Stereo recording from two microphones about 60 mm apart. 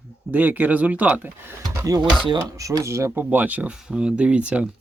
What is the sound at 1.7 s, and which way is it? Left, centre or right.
Speech, right.